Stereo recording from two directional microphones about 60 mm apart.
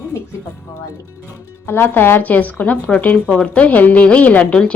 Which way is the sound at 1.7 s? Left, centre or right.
Left.